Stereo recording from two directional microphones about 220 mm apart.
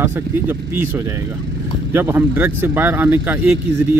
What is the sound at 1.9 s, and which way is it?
Speech, 10° right (ahead or behind).